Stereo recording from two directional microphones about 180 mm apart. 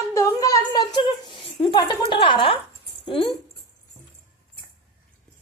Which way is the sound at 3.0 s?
30° left (ahead or behind).